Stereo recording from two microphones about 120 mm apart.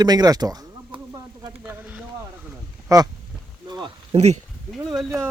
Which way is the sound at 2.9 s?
30° right (ahead or behind).